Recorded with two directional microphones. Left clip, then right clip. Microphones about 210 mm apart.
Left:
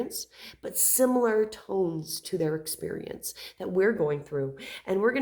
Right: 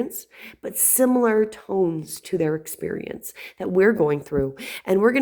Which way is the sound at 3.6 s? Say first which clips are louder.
Right 7 dB; 35° right (ahead or behind).